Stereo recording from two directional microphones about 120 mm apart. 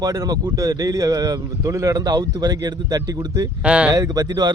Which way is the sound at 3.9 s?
30° right (ahead or behind).